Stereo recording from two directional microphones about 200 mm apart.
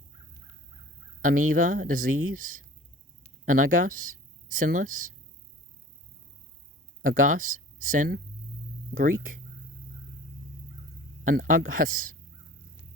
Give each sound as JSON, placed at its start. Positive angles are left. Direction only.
{"t": 1.2, "sound": "speech", "side_deg": -45}
{"t": 7.0, "sound": "speech", "side_deg": -45}
{"t": 11.2, "sound": "speech", "side_deg": -40}